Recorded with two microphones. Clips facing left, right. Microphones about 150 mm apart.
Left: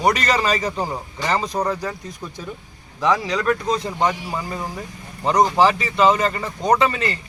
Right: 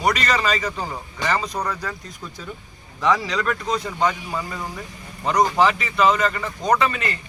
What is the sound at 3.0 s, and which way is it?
Speech, 20° left (ahead or behind).